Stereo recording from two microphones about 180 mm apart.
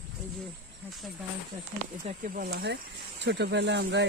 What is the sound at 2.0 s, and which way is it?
Speech, 50° right (ahead or behind).